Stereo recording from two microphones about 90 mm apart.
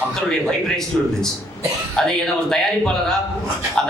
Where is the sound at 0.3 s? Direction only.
5° left (ahead or behind).